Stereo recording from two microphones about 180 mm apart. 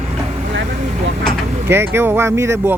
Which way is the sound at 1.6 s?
15° right (ahead or behind).